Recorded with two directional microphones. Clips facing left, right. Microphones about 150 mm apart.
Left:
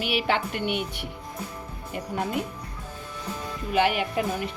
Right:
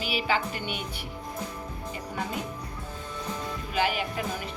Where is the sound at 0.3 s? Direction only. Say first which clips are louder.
Left 3 dB; 65° left (ahead or behind).